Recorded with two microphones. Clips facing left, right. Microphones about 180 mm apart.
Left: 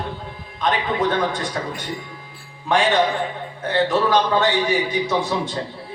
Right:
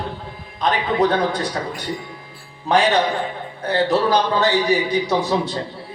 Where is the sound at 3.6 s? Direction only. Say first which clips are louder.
Right 1 dB; 40° right (ahead or behind).